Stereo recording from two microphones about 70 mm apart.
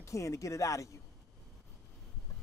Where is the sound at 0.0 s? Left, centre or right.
Left.